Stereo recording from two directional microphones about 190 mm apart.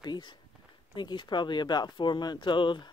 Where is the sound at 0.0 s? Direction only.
25° left (ahead or behind).